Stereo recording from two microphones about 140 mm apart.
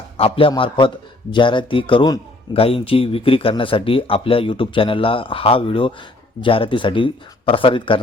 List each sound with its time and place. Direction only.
0.2 s a man's voice: 40° left (ahead or behind)